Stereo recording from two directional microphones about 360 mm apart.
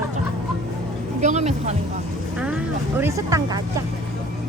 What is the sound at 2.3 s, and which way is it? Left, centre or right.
Speech, centre.